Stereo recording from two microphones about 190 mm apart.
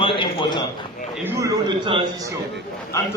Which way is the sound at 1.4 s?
20° right (ahead or behind).